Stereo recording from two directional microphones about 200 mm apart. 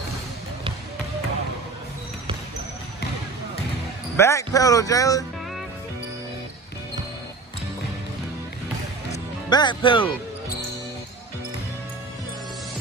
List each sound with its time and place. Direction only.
4.2 s speech: 15° left (ahead or behind)
9.1 s speech: 20° left (ahead or behind)